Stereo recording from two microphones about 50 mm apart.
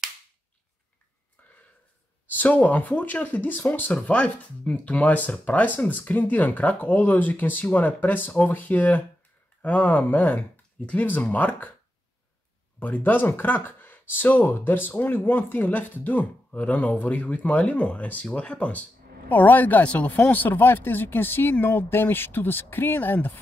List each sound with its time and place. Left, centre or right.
2.2 s speech: left
3.9 s speech: left
12.7 s speech: left